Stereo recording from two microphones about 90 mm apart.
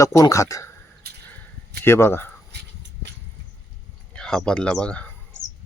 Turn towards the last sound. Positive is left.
turn(degrees=15)  # may be behind; listen again after turning